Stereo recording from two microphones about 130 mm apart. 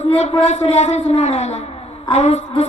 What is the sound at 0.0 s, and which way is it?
Speech, 60° left (ahead or behind).